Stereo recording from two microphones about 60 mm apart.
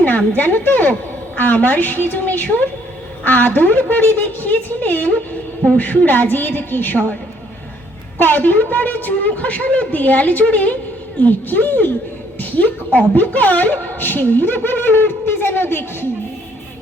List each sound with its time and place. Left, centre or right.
0.3 s a woman's voice: left
8.2 s a woman's voice: left